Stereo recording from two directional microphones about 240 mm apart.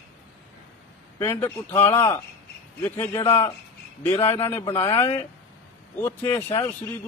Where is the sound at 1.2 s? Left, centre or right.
Centre.